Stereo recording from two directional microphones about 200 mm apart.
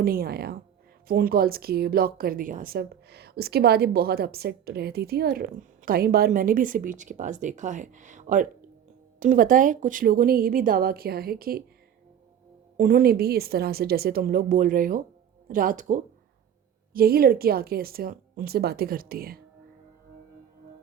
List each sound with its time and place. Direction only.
0.0 s a woman's voice: 45° right (ahead or behind)
12.7 s a woman's voice: 45° right (ahead or behind)